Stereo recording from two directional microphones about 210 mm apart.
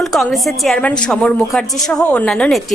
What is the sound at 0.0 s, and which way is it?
A woman's voice, centre (ahead or behind).